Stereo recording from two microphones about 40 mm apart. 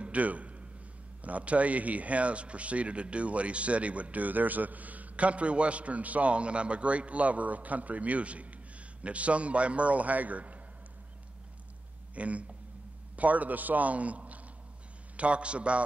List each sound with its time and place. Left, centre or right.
0.0 s a sound: right
1.2 s speech: right
12.2 s a man's voice: right